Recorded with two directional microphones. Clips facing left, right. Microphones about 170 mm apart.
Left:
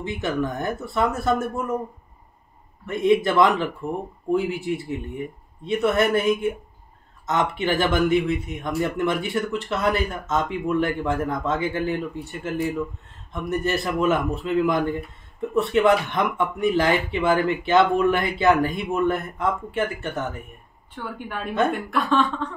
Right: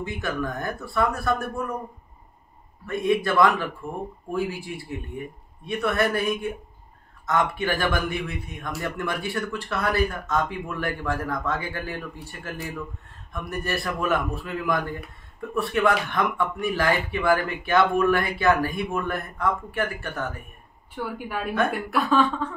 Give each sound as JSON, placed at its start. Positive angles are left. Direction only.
{"t": 0.0, "sound": "a man's voice", "side_deg": 20}
{"t": 2.9, "sound": "a man's voice", "side_deg": 20}
{"t": 20.9, "sound": "a woman's voice", "side_deg": -5}